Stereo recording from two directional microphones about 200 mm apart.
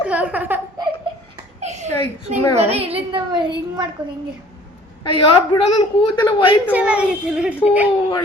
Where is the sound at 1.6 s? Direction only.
35° right (ahead or behind).